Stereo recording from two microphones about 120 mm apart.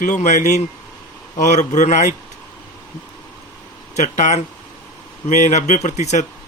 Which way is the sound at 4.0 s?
80° left.